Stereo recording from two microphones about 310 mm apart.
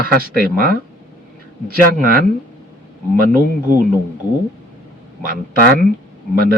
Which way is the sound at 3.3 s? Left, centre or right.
Right.